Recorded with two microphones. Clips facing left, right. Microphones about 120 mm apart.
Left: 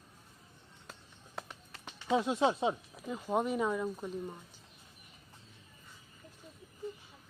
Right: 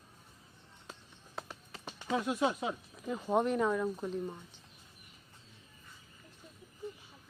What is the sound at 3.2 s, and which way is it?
Speech, 5° left (ahead or behind).